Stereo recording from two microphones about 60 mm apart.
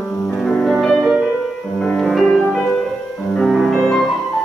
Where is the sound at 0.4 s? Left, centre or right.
Centre.